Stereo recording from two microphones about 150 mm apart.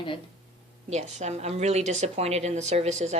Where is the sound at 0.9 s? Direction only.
45° right (ahead or behind).